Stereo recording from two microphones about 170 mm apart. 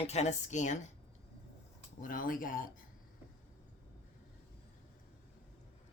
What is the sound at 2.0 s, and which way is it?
Speech, 55° left (ahead or behind).